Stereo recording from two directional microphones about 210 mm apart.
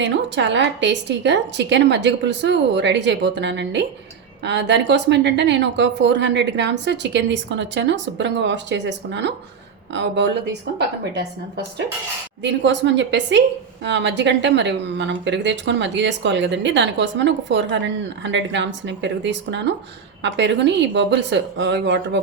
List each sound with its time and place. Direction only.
0.0 s a woman's voice: 60° right (ahead or behind)